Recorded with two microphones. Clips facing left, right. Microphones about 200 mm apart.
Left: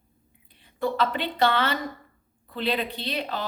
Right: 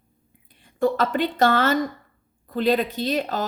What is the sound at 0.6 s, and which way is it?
A woman's voice, 45° right (ahead or behind).